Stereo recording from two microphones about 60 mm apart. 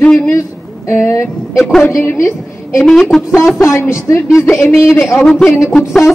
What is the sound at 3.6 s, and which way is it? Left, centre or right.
Speech, left.